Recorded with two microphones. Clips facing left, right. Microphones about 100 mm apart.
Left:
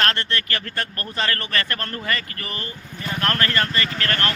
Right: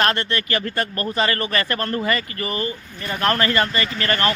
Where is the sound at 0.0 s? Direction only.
10° right (ahead or behind).